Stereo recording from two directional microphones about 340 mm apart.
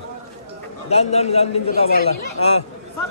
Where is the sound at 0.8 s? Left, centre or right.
Centre.